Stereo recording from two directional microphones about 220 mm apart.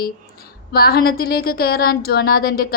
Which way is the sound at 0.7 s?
45° left (ahead or behind).